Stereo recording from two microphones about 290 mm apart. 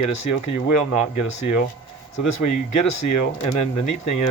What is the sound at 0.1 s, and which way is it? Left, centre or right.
Speech, left.